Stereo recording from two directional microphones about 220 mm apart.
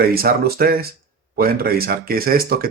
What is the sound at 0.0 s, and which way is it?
Speech, 45° right (ahead or behind).